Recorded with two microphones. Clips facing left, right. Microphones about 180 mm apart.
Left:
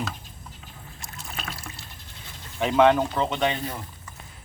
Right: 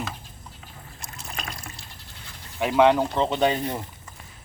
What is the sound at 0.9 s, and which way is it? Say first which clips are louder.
Trickle: right 1 dB; centre (ahead or behind).